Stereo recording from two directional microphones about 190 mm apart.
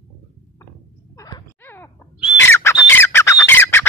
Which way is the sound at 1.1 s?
15° left (ahead or behind).